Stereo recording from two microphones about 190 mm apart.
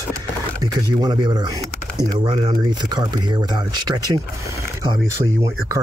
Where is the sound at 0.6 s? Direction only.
20° right (ahead or behind).